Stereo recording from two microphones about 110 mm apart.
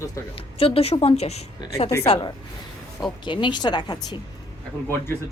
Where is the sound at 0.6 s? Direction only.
60° left (ahead or behind).